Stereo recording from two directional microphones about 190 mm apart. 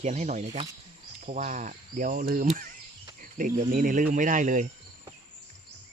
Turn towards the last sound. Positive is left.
turn(degrees=-40)  # may be behind; listen again after turning